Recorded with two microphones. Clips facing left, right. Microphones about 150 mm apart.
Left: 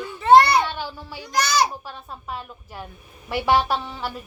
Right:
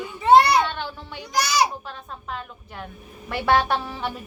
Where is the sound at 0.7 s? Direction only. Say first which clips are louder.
Even; 5° left (ahead or behind).